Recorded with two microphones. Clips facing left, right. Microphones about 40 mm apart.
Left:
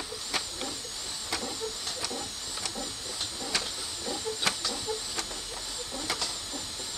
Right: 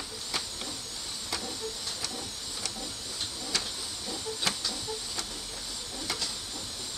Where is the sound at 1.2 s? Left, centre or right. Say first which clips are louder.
Left 2 dB; centre.